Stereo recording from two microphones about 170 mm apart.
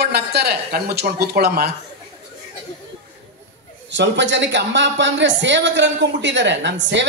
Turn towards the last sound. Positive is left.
turn(degrees=-90)